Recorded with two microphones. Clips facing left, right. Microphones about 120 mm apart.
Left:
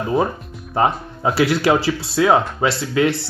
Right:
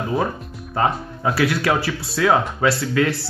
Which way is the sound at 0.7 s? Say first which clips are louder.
Left 2 dB; 25° left (ahead or behind).